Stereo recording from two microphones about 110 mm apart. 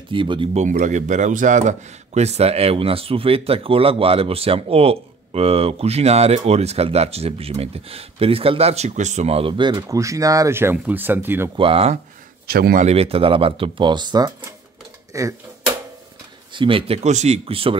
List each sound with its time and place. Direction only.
0.1 s speech: 50° right (ahead or behind)
0.6 s a man's voice: 90° right; by 9.5 s 70° right (ahead or behind)
9.5 s speech: 45° right (ahead or behind); by 11.5 s 20° right (ahead or behind)
11.5 s a man's voice: 55° right (ahead or behind); by 15.3 s 30° right (ahead or behind)
16.5 s a man's voice: 55° right (ahead or behind)